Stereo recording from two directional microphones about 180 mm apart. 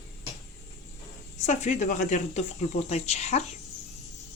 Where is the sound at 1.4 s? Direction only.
40° left (ahead or behind).